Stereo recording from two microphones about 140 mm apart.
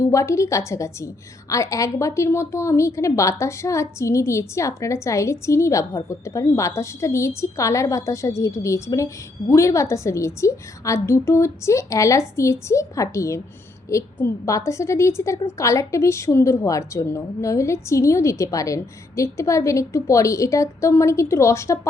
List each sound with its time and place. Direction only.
0.0 s a woman's voice: 20° left (ahead or behind)